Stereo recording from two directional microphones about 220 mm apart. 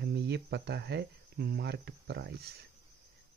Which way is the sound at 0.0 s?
45° right (ahead or behind).